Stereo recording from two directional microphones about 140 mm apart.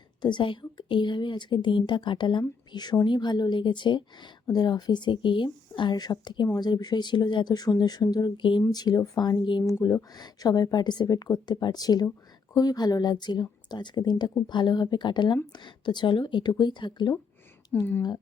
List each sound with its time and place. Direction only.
0.2 s a woman's voice: 35° left (ahead or behind)
17.7 s speech: 10° left (ahead or behind)